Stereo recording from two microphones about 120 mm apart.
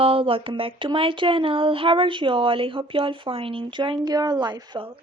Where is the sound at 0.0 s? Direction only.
50° right (ahead or behind).